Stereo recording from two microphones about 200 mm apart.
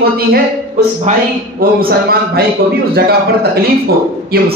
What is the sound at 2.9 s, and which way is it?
Speech, 50° right (ahead or behind).